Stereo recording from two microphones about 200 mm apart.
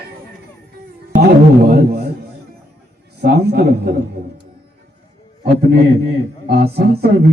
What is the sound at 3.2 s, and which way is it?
Speech, 55° right (ahead or behind).